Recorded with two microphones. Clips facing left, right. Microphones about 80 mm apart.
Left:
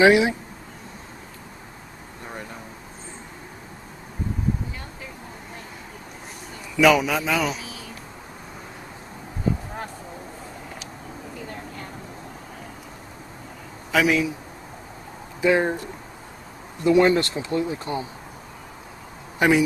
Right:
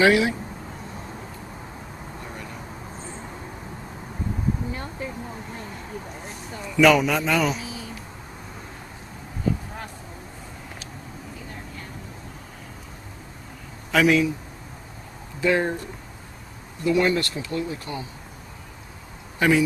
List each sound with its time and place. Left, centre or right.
0.0 s speech: left
6.8 s a man's voice: centre
13.9 s a man's voice: centre
15.4 s speech: centre
16.8 s speech: left
19.3 s speech: centre